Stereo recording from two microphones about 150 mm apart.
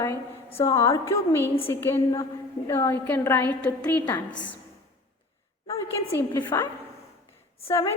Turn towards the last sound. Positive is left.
turn(degrees=20)  # may be behind; listen again after turning